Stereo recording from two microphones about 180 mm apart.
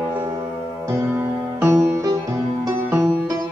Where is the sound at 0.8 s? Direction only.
15° right (ahead or behind).